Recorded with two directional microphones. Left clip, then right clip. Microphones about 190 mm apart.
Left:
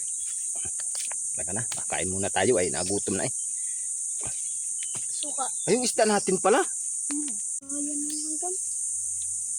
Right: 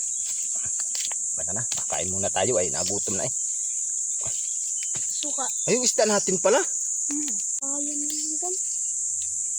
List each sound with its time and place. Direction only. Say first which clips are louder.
1.9 s cricket: even; 30° left (ahead or behind)
5.6 s cricket: right 1 dB; 20° left (ahead or behind)